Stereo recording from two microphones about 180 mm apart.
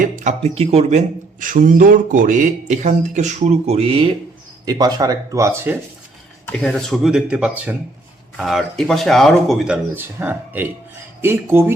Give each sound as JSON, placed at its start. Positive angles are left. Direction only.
{"t": 0.0, "sound": "speech", "side_deg": -40}
{"t": 4.6, "sound": "speech", "side_deg": -20}
{"t": 6.4, "sound": "speech", "side_deg": 5}